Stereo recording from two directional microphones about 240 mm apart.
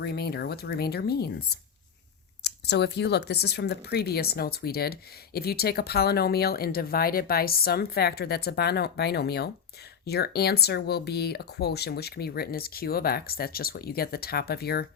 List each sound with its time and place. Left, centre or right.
0.0 s speech: left
2.4 s speech: left